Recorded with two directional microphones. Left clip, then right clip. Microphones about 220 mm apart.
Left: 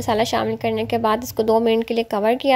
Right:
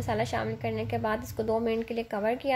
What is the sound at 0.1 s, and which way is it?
A woman's voice, 40° left (ahead or behind).